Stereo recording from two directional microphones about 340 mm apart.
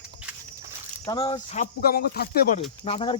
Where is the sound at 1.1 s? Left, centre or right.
Centre.